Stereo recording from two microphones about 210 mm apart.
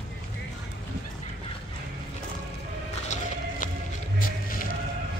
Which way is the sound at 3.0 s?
35° left (ahead or behind).